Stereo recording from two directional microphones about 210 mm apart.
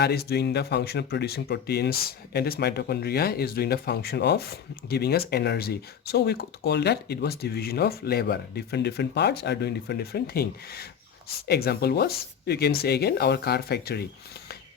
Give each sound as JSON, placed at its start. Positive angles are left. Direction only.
{"t": 0.0, "sound": "speech", "side_deg": 50}